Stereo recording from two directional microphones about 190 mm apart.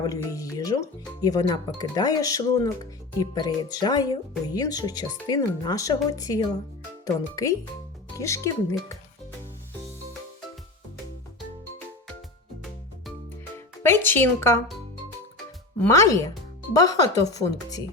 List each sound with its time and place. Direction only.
0.0 s speech: 20° left (ahead or behind)
13.8 s speech: 10° left (ahead or behind)
15.8 s speech: 15° left (ahead or behind)